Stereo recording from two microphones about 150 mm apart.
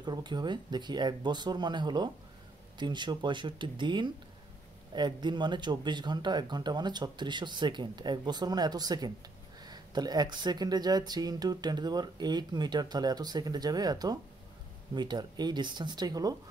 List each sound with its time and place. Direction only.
0.0 s speech: 30° right (ahead or behind)